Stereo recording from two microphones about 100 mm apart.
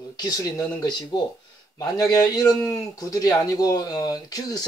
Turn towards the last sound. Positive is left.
turn(degrees=40)  # may be behind; listen again after turning